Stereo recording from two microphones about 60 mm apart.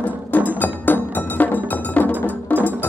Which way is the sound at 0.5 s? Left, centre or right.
Left.